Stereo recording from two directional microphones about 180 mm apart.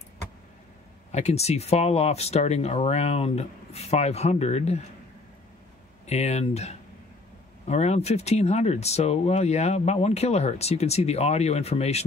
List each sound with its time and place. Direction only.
1.1 s speech: 35° left (ahead or behind)
6.0 s speech: 35° left (ahead or behind)